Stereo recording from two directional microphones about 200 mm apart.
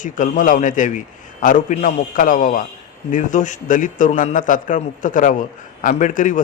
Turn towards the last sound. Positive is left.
turn(degrees=40)  # may be behind; listen again after turning